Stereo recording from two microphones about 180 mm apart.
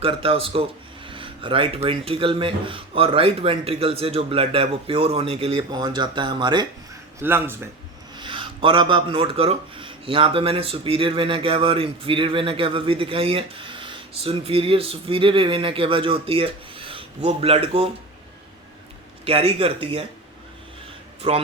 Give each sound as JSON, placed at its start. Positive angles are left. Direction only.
{"t": 0.0, "sound": "speech", "side_deg": -30}
{"t": 7.2, "sound": "speech", "side_deg": -10}
{"t": 8.1, "sound": "speech", "side_deg": -25}
{"t": 19.2, "sound": "speech", "side_deg": -35}
{"t": 21.2, "sound": "speech", "side_deg": -35}